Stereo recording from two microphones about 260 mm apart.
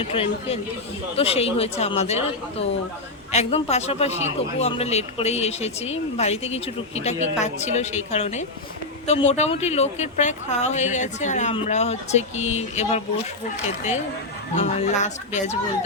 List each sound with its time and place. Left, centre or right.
0.0 s a man's voice: left
14.5 s a man's voice: left